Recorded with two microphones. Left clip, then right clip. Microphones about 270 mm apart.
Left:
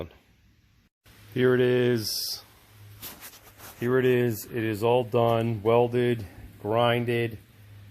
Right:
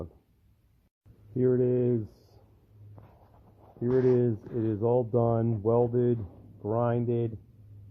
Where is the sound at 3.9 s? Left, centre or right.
Left.